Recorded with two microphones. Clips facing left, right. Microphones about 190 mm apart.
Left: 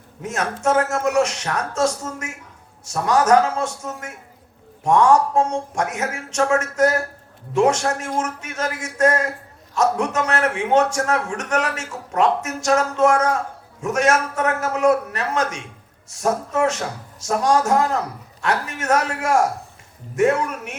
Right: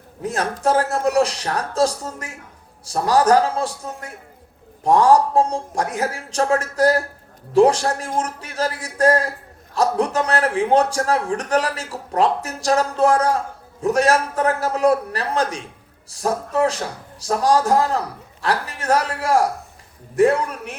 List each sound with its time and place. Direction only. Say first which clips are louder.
0.2 s a man's voice: right 2 dB; 35° right (ahead or behind)